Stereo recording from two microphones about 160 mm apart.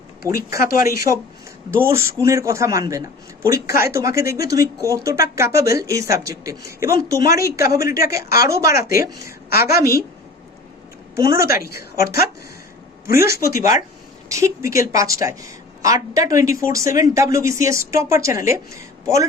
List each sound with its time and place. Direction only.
0.2 s speech: 20° right (ahead or behind)
0.6 s speech: 65° left (ahead or behind)
1.7 s speech: 15° right (ahead or behind)
11.1 s speech: 20° right (ahead or behind)
13.1 s speech: 20° right (ahead or behind)